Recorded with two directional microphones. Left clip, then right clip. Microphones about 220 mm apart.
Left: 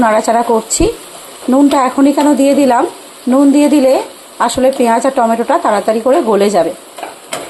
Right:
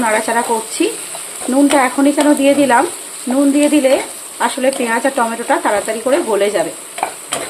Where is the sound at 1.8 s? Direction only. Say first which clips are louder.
Left 2 dB; 20° left (ahead or behind).